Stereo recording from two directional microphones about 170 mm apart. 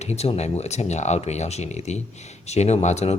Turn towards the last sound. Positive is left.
turn(degrees=40)  # may be behind; listen again after turning